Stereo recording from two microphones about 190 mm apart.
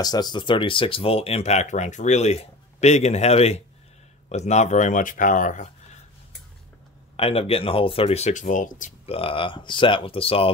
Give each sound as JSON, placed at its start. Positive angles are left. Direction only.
{"t": 0.0, "sound": "speech", "side_deg": 20}
{"t": 7.2, "sound": "speech", "side_deg": 30}